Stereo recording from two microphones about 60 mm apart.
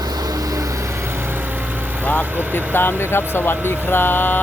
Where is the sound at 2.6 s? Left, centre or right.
Left.